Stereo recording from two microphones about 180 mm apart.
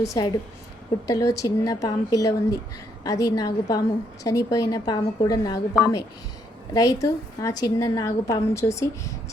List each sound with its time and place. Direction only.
0.0 s a woman's voice: 20° left (ahead or behind)